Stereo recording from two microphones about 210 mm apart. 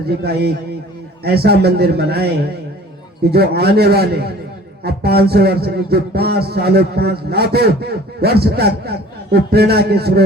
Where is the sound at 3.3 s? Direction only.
50° right (ahead or behind).